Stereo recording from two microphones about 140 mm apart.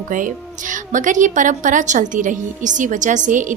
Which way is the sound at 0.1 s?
70° right (ahead or behind).